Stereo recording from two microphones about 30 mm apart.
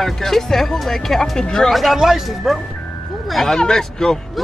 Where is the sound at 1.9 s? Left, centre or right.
Centre.